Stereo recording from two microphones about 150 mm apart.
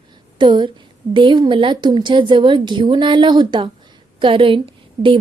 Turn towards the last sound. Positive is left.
turn(degrees=-35)  # may be behind; listen again after turning